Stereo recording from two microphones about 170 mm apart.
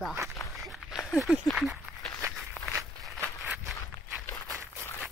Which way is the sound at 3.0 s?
Centre (ahead or behind).